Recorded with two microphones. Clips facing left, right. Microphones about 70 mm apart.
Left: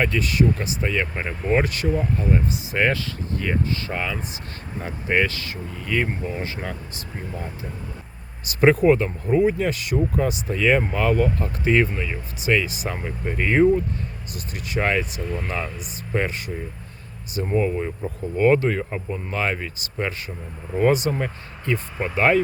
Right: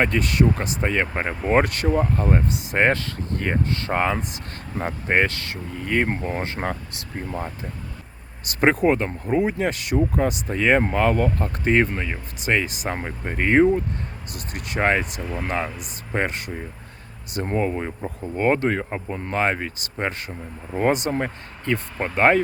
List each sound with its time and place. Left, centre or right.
0.1 s speech: right
15.2 s speech: centre
15.4 s speech: right
16.1 s speech: right
17.3 s speech: right
19.0 s speech: right
19.4 s speech: right